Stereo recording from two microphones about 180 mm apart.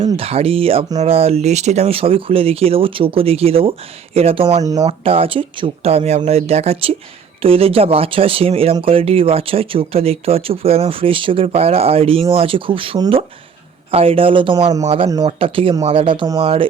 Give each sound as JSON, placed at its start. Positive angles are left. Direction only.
{"t": 0.0, "sound": "speech", "side_deg": -35}
{"t": 4.6, "sound": "speech", "side_deg": -20}
{"t": 4.9, "sound": "speech", "side_deg": -30}
{"t": 14.8, "sound": "speech", "side_deg": -30}